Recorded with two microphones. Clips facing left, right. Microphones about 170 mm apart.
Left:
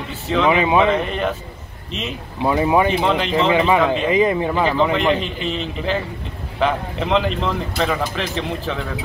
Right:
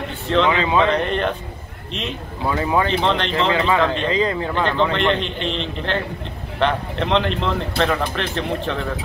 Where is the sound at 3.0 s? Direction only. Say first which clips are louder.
Left 2 dB; 5° left (ahead or behind).